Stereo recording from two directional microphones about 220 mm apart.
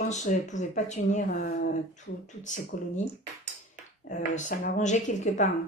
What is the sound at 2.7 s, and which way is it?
Speech, 40° left (ahead or behind).